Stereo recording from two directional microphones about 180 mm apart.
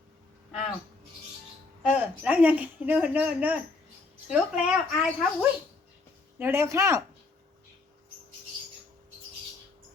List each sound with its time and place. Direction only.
1.8 s speech: 5° right (ahead or behind)